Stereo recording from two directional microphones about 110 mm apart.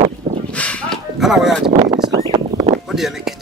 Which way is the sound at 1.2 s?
Centre (ahead or behind).